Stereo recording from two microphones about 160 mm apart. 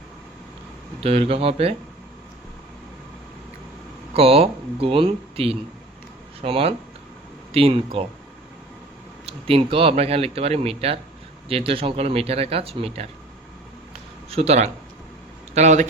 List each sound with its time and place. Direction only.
1.0 s speech: 35° right (ahead or behind)
4.1 s speech: 35° right (ahead or behind)
9.2 s speech: 35° right (ahead or behind)
14.3 s a man's voice: 40° right (ahead or behind)